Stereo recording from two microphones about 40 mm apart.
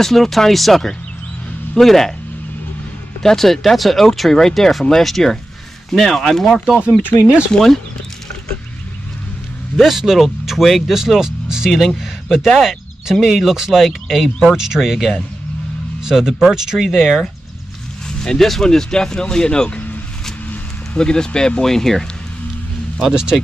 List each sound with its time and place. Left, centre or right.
0.0 s speech: centre
3.2 s speech: centre
7.0 s speech: left
7.5 s speech: centre
9.8 s speech: centre
12.0 s speech: centre
18.2 s speech: centre
20.9 s speech: centre
21.6 s speech: centre